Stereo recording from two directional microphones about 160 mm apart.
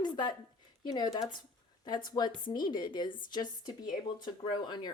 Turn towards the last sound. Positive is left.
turn(degrees=25)  # may be behind; listen again after turning